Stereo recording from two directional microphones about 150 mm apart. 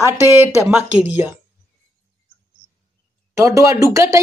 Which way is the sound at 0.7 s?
10° right (ahead or behind).